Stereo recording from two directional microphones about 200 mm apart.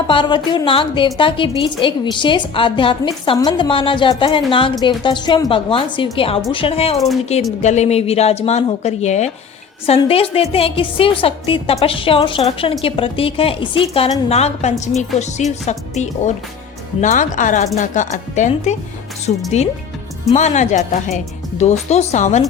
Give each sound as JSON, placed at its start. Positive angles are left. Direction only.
{"t": 0.1, "sound": "a woman's voice", "side_deg": 25}